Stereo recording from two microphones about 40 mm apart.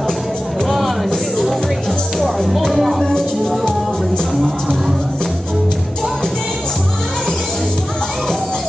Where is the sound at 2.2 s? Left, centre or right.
Centre.